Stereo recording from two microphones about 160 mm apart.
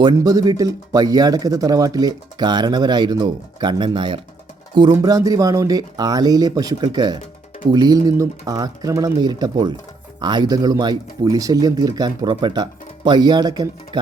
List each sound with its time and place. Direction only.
0.2 s speech: 20° right (ahead or behind)